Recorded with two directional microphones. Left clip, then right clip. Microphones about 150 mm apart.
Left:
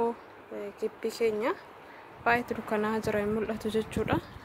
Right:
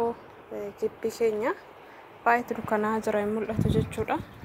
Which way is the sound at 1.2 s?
15° left (ahead or behind).